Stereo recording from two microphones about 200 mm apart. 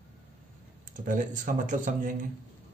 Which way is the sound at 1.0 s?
40° right (ahead or behind).